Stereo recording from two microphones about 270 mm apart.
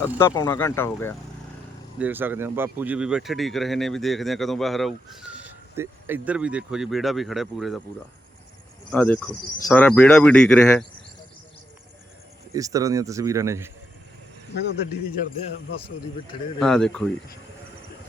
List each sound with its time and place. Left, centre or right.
0.0 s speech: centre
2.0 s speech: centre
8.9 s speech: centre
12.5 s speech: centre
14.5 s speech: left
16.6 s speech: centre